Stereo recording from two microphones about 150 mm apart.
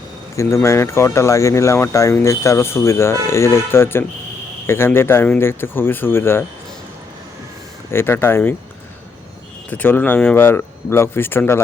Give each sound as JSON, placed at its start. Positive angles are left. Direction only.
{"t": 0.3, "sound": "speech", "side_deg": 20}
{"t": 7.9, "sound": "speech", "side_deg": 15}
{"t": 9.6, "sound": "speech", "side_deg": 10}